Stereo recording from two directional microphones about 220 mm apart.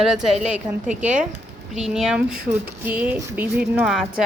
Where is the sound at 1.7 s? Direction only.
Centre (ahead or behind).